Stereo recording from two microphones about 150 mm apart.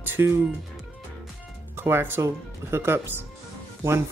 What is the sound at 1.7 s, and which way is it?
Speech, 15° right (ahead or behind).